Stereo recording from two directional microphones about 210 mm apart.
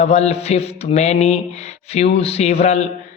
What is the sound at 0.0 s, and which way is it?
A man's voice, 30° left (ahead or behind).